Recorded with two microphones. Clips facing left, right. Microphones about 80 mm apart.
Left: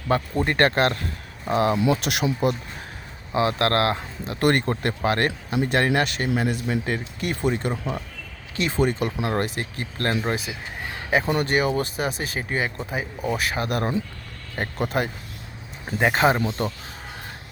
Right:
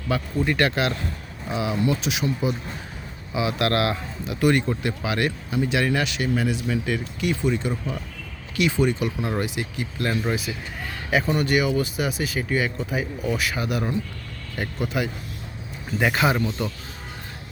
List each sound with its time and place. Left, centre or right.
0.1 s speech: left
1.5 s speech: left
3.3 s speech: left
7.7 s speech: left
10.1 s speech: left
16.0 s speech: left